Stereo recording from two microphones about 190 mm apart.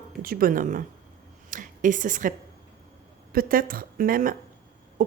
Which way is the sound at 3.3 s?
50° right (ahead or behind).